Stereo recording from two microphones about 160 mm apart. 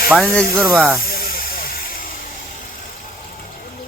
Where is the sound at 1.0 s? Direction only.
65° left (ahead or behind).